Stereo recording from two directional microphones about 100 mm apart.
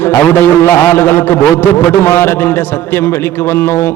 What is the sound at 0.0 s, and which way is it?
A man's voice, 20° left (ahead or behind).